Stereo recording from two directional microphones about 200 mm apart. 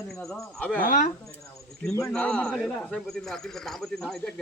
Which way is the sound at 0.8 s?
40° left (ahead or behind).